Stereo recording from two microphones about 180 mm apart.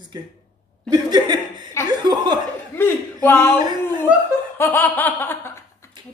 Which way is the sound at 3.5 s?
25° right (ahead or behind).